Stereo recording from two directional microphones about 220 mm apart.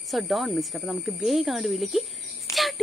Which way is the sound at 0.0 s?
Centre (ahead or behind).